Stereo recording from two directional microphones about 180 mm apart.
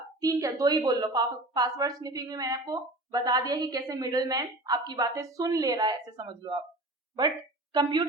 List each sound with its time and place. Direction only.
0.2 s a woman's voice: 20° right (ahead or behind)